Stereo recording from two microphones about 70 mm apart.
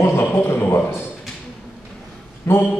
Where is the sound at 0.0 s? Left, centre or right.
Left.